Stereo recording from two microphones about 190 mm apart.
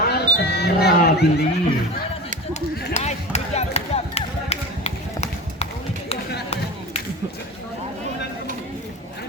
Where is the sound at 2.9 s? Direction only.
35° left (ahead or behind).